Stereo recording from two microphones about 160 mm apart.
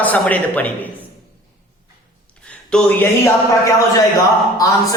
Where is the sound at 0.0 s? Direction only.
10° left (ahead or behind).